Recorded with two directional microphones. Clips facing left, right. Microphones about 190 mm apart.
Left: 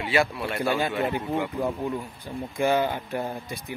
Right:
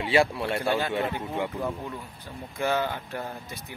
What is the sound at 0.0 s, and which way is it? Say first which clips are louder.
Speech: right 1 dB; 30° right (ahead or behind).